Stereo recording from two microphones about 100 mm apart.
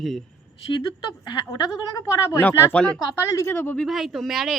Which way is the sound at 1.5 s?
35° left (ahead or behind).